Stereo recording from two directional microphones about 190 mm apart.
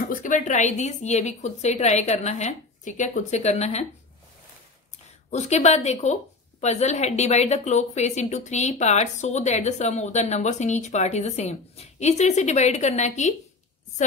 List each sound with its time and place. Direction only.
0.1 s a woman's voice: 40° left (ahead or behind)
5.3 s a woman's voice: 35° left (ahead or behind)